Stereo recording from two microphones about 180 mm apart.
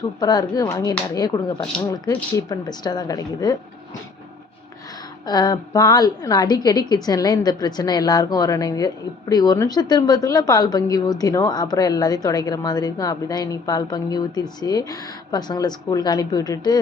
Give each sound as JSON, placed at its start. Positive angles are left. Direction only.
{"t": 0.2, "sound": "a woman's voice", "side_deg": 20}
{"t": 5.2, "sound": "a woman's voice", "side_deg": 20}